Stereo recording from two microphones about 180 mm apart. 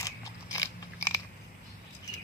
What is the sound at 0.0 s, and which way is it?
Biting, 20° left (ahead or behind).